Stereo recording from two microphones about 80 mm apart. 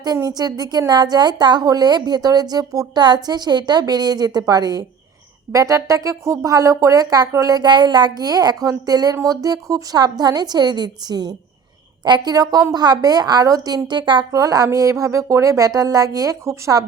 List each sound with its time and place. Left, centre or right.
0.2 s a woman's voice: right
5.5 s a woman's voice: right
13.8 s speech: right
14.3 s speech: right